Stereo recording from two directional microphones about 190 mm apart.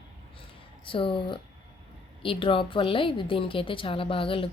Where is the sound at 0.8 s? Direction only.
25° left (ahead or behind).